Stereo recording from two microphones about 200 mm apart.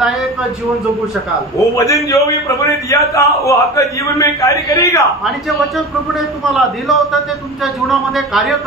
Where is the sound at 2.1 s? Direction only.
15° left (ahead or behind).